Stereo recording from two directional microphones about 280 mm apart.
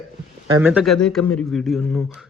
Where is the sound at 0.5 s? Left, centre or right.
Centre.